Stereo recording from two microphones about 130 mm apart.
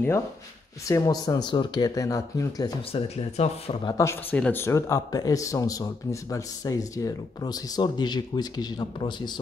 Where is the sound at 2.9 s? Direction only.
50° left (ahead or behind).